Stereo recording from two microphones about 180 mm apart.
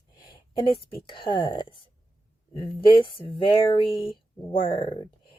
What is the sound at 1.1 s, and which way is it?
Speech, 25° left (ahead or behind).